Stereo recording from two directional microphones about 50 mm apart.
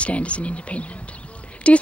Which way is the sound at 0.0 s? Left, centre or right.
Left.